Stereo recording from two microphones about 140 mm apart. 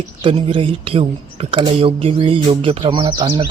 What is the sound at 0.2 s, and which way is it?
Speech, 40° right (ahead or behind).